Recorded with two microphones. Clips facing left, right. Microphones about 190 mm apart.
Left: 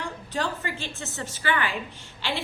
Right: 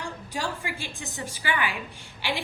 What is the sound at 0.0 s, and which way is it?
A woman's voice, 10° right (ahead or behind).